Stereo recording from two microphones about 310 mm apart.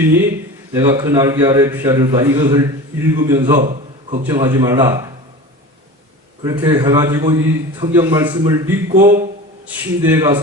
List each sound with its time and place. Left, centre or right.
0.7 s a man's voice: centre
4.2 s a man's voice: centre
6.4 s a man's voice: centre
9.0 s a man's voice: right
9.6 s a man's voice: centre